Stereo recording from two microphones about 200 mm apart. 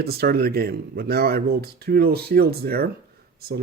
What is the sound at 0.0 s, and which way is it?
Speech, 50° right (ahead or behind).